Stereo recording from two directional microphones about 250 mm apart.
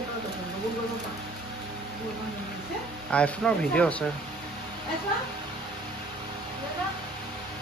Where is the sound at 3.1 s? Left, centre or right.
Centre.